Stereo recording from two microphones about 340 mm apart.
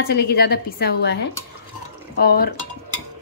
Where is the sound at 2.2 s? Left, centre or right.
Left.